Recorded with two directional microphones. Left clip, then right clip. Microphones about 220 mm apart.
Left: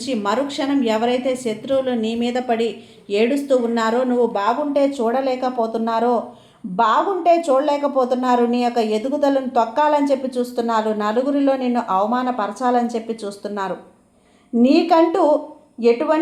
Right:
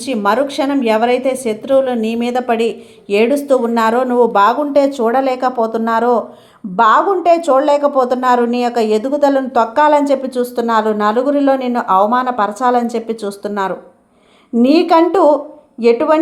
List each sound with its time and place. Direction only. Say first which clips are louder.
0.0 s a woman's voice: right 6 dB; 20° right (ahead or behind)